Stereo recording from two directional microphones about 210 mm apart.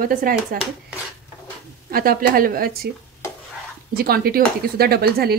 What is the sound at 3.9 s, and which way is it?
Speech, 45° right (ahead or behind).